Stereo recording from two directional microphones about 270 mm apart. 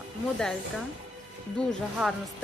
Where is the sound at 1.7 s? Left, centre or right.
Centre.